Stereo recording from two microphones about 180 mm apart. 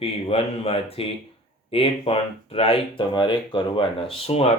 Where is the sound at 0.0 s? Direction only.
30° left (ahead or behind).